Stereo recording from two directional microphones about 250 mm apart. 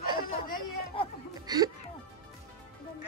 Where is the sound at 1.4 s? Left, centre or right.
Centre.